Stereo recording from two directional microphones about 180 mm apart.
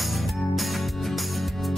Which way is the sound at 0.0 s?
Centre (ahead or behind).